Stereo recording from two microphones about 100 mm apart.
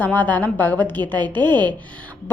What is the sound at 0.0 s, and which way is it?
A woman's voice, 20° left (ahead or behind).